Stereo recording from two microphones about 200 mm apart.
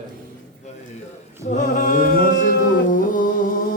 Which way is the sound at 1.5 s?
45° left (ahead or behind).